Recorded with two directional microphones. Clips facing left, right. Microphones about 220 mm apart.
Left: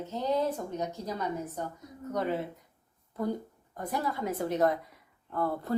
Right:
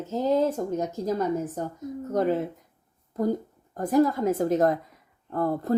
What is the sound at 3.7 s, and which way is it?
A woman's voice, 45° right (ahead or behind).